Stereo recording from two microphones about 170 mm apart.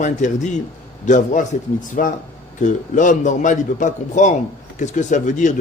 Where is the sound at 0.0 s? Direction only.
45° left (ahead or behind).